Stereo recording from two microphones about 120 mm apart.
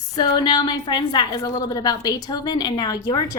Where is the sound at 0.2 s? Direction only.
35° left (ahead or behind).